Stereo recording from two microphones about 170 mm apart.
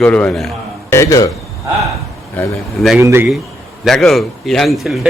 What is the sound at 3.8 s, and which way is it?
A man's voice, centre (ahead or behind).